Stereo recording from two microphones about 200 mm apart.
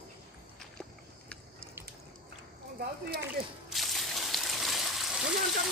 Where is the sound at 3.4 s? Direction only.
50° right (ahead or behind).